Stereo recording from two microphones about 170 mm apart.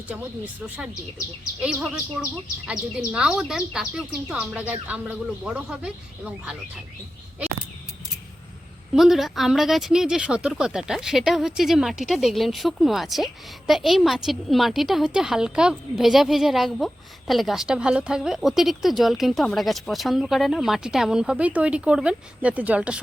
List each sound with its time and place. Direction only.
0.1 s speech: 10° right (ahead or behind)
2.2 s speech: centre (ahead or behind)
9.0 s speech: centre (ahead or behind)